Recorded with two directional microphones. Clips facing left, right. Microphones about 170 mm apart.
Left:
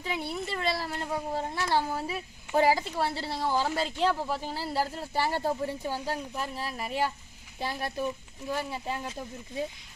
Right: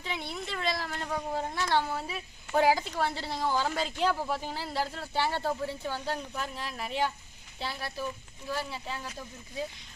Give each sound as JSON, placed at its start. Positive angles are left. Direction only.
{"t": 0.0, "sound": "a woman's voice", "side_deg": 5}
{"t": 8.0, "sound": "a woman's voice", "side_deg": 20}